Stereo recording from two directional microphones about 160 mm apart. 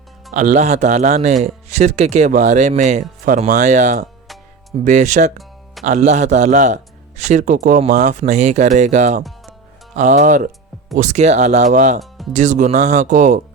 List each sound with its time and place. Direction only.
0.3 s speech: 45° right (ahead or behind)
11.9 s music: centre (ahead or behind)
12.3 s speech: 50° right (ahead or behind)